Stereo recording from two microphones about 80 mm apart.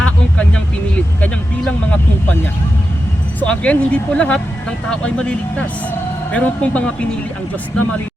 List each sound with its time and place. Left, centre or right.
0.0 s vehicle: centre
3.4 s speech: centre